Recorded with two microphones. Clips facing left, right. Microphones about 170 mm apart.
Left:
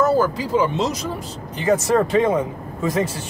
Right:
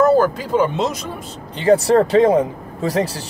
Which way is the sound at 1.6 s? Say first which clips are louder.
Right 4 dB; 30° right (ahead or behind).